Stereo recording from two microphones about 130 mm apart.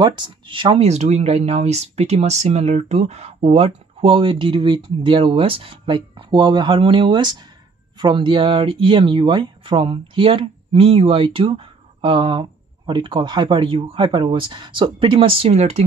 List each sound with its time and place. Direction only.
0.0 s speech: 35° right (ahead or behind)
0.7 s speech: 55° right (ahead or behind)